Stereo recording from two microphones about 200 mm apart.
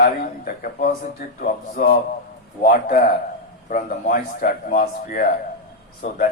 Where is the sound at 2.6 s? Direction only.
45° left (ahead or behind).